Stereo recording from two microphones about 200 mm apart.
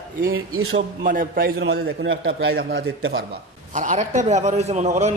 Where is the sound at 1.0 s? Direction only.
45° right (ahead or behind).